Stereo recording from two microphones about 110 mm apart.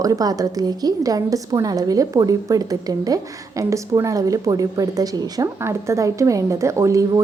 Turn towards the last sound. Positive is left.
turn(degrees=-30)  # may be behind; listen again after turning